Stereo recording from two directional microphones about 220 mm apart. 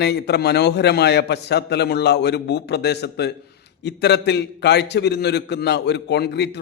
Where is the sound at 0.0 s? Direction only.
50° left (ahead or behind).